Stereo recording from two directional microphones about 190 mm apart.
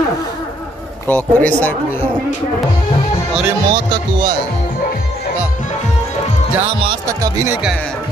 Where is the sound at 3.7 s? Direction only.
25° right (ahead or behind).